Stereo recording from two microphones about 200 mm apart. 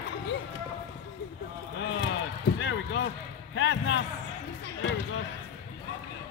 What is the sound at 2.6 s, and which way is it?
Basketball bounce, 65° left (ahead or behind).